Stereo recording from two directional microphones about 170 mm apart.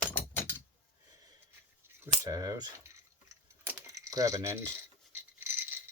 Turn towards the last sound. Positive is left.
turn(degrees=-10)  # may be behind; listen again after turning